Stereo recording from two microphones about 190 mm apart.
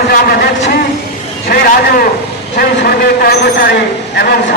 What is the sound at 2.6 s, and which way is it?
A man's voice, 55° left (ahead or behind).